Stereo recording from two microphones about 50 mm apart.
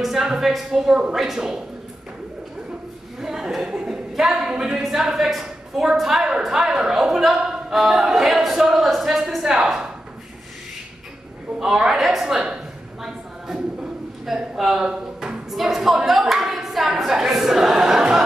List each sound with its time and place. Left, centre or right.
0.0 s a woman's voice: centre
3.2 s a sound: centre
3.6 s a woman's voice: centre
4.1 s a man's voice: centre
11.6 s speech: centre
14.3 s a man's voice: centre